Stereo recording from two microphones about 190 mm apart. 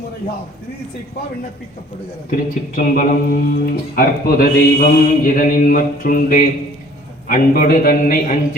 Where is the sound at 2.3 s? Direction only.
45° left (ahead or behind).